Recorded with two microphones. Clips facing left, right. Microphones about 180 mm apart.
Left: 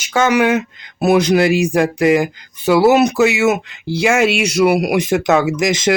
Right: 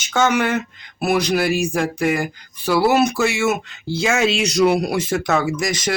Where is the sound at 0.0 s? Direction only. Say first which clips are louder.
Left 4 dB; 10° left (ahead or behind).